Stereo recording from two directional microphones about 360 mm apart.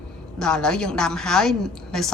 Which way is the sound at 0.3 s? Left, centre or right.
Centre.